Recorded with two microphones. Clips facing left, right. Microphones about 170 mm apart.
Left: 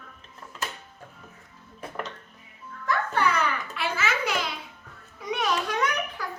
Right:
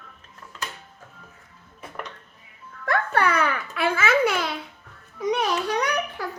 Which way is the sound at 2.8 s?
60° right (ahead or behind).